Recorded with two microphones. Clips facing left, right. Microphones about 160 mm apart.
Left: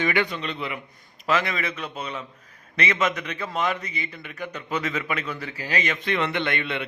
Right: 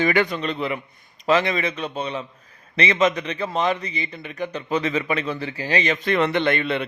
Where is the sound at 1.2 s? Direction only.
25° right (ahead or behind).